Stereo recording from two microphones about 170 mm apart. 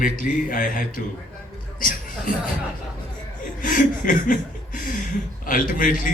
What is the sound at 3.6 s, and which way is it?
Speech, 50° left (ahead or behind).